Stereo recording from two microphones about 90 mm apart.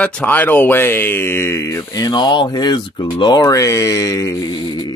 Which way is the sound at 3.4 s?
40° left (ahead or behind).